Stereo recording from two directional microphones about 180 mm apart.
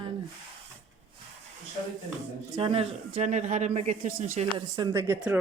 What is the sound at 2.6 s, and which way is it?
Speech, 30° right (ahead or behind).